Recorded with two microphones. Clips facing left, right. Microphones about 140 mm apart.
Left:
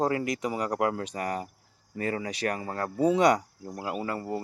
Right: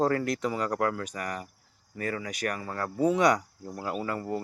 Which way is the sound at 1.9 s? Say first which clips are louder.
Left 2 dB; 30° left (ahead or behind).